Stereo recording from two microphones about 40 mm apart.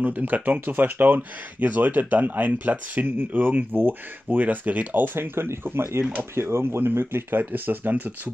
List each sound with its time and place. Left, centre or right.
0.2 s speech: right
4.4 s speech: right